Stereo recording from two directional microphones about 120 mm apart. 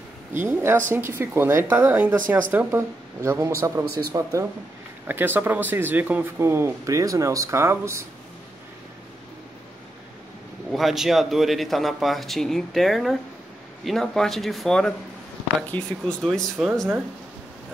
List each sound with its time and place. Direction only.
0.5 s speech: 20° right (ahead or behind)
5.0 s speech: 15° right (ahead or behind)
10.7 s a man's voice: centre (ahead or behind)
16.2 s a man's voice: 5° left (ahead or behind)